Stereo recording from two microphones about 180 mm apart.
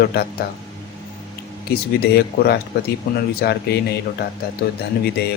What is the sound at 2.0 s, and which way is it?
Speech, 60° left (ahead or behind).